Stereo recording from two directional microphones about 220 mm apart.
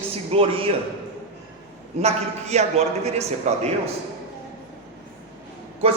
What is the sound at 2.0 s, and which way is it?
A man's voice, 30° right (ahead or behind).